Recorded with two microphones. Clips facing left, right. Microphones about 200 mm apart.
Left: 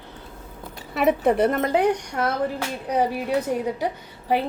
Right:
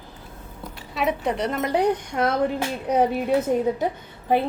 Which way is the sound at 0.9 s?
55° left (ahead or behind).